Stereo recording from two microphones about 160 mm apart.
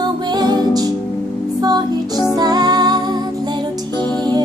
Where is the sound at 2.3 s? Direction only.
25° right (ahead or behind).